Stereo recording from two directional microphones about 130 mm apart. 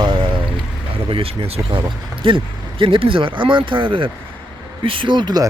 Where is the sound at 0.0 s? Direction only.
35° right (ahead or behind).